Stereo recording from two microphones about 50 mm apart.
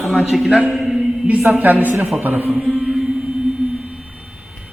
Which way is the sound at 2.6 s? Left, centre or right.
Centre.